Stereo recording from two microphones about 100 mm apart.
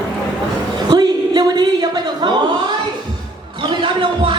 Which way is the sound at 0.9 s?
45° right (ahead or behind).